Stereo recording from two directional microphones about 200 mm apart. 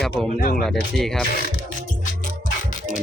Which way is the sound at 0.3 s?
50° left (ahead or behind).